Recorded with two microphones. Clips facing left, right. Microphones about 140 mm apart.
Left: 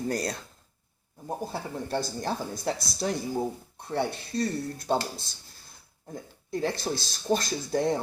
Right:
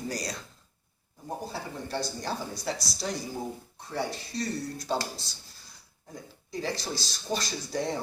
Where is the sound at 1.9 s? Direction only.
50° left (ahead or behind).